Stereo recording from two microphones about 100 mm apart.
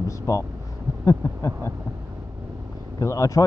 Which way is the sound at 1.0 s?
30° left (ahead or behind).